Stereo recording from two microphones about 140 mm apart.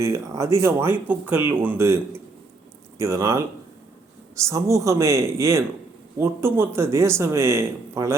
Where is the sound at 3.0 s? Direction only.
20° right (ahead or behind).